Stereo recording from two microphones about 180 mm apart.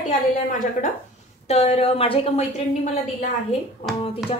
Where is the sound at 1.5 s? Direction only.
35° left (ahead or behind).